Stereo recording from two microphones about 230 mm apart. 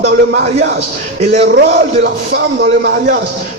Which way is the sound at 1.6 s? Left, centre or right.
Right.